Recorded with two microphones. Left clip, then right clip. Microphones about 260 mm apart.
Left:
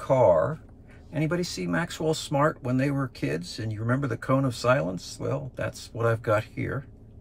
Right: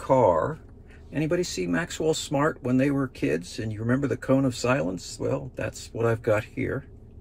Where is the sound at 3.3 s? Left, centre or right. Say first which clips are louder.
Right 3 dB; centre.